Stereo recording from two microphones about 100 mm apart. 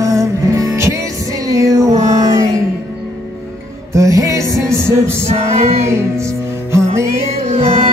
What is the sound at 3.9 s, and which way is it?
Music, 35° right (ahead or behind).